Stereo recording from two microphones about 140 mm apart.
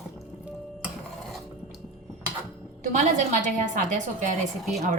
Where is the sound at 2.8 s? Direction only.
60° right (ahead or behind).